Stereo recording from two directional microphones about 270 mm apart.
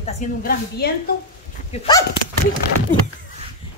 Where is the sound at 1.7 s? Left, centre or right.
Centre.